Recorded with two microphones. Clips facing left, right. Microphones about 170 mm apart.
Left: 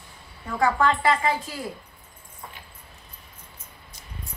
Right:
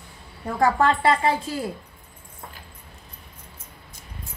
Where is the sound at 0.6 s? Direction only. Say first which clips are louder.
Right 2 dB; 35° right (ahead or behind).